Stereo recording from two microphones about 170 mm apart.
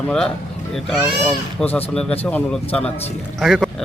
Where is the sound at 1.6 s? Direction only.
10° left (ahead or behind).